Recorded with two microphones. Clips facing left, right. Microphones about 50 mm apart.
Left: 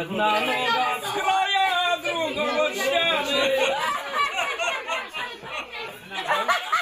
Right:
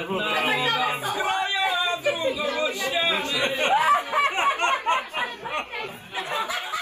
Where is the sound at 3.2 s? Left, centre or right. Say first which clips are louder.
Left 3 dB; right.